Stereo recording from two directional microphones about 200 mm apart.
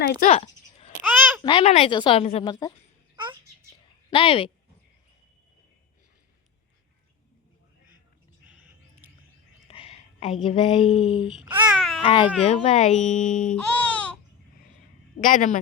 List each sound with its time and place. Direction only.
0.0 s speech: 45° left (ahead or behind)
0.3 s a sound: 30° left (ahead or behind)
0.9 s a sound: 10° right (ahead or behind)
1.4 s speech: 25° left (ahead or behind)
4.1 s speech: 25° left (ahead or behind)
9.6 s whispering: 30° left (ahead or behind)
10.4 s speech: 25° left (ahead or behind)
11.3 s babbling: 5° right (ahead or behind)
12.0 s a child's voice: 25° left (ahead or behind); by 13.6 s 40° left (ahead or behind)
13.7 s baby cry: 5° left (ahead or behind)
15.2 s a child's voice: 40° left (ahead or behind)